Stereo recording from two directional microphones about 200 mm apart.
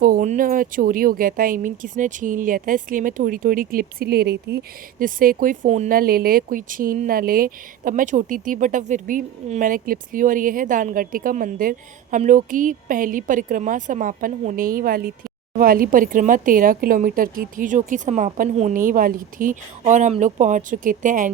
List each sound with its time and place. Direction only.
0.0 s a woman's voice: 40° right (ahead or behind)